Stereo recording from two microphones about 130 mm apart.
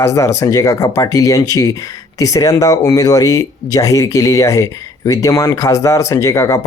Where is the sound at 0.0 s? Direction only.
20° left (ahead or behind).